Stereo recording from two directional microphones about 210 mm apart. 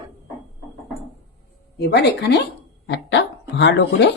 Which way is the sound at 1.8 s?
50° left (ahead or behind).